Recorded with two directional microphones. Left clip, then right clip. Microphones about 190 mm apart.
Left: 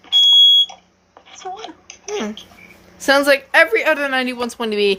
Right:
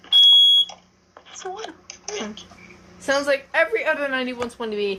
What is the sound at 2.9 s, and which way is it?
A woman's voice, 50° left (ahead or behind).